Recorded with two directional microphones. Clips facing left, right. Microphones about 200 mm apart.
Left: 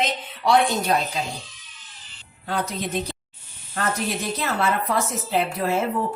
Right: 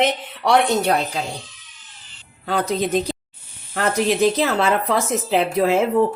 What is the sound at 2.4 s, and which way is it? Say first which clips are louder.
Speech: right 6 dB; 90° right.